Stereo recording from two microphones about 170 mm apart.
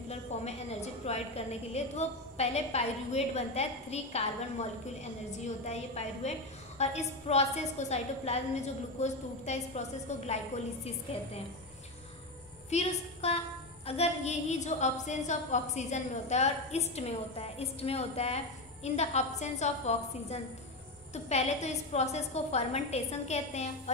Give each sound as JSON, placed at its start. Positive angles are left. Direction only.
{"t": 0.1, "sound": "a woman's voice", "side_deg": 40}
{"t": 5.7, "sound": "a woman's voice", "side_deg": 40}
{"t": 12.6, "sound": "a woman's voice", "side_deg": 40}